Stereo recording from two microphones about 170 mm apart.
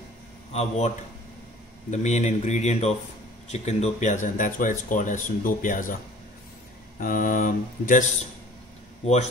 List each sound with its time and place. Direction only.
0.5 s a man's voice: 40° left (ahead or behind)
7.0 s speech: 50° left (ahead or behind)